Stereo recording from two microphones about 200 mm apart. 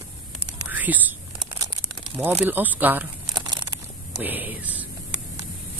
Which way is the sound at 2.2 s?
10° right (ahead or behind).